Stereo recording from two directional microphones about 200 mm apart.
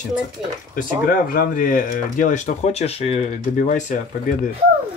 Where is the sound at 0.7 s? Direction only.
45° left (ahead or behind).